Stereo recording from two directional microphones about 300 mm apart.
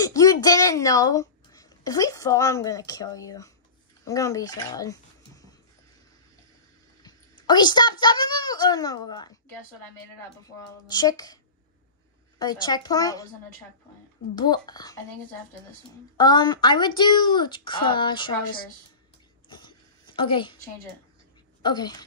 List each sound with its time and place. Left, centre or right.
0.0 s speech: centre
7.0 s a woman's voice: centre
10.4 s speech: centre
12.4 s speech: centre
14.3 s speech: centre
16.2 s speech: centre
20.2 s speech: centre
21.6 s speech: centre